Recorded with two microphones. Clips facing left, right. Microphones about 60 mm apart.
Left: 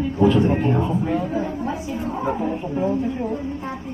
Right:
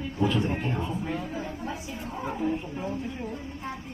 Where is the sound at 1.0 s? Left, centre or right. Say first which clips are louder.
Left 10 dB; left.